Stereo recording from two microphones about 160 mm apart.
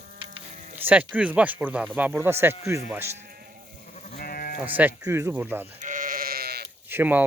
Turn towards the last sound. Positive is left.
turn(degrees=-10)  # may be behind; listen again after turning